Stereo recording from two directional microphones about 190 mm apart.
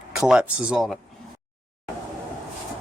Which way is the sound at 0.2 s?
5° right (ahead or behind).